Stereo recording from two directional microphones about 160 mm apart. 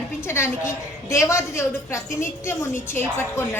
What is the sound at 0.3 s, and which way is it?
A woman's voice, 15° left (ahead or behind).